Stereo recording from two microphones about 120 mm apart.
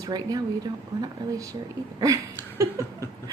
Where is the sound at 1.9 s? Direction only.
30° right (ahead or behind).